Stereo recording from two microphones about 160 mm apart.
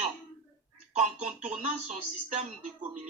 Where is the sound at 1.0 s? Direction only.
45° right (ahead or behind).